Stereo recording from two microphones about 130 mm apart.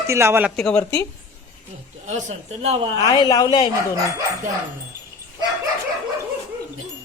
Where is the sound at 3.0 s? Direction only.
30° left (ahead or behind).